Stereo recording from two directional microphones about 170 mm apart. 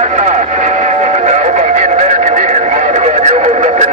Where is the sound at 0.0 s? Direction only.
45° right (ahead or behind).